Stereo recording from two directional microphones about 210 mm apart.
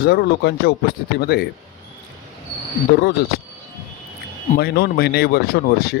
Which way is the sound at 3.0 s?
50° left (ahead or behind).